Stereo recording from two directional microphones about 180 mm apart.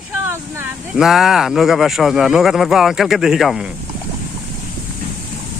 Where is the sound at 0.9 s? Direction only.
Centre (ahead or behind).